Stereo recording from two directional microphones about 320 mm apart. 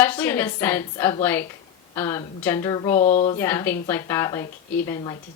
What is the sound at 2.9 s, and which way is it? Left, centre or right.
Speech, left.